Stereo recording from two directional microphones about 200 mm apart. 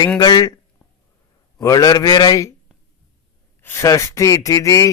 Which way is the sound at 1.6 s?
20° left (ahead or behind).